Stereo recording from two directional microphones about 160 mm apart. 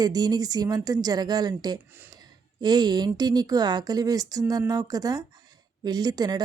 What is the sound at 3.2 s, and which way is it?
Speech, 25° right (ahead or behind).